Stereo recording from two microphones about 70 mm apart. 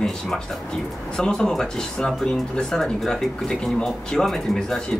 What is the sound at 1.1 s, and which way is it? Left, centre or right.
Speech, centre.